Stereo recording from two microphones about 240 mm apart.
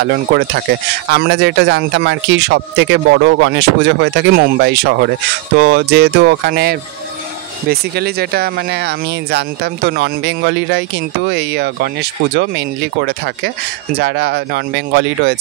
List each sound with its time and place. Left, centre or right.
0.0 s speech: right